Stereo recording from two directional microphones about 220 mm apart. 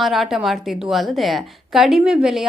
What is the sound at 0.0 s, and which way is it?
A woman's voice, centre (ahead or behind).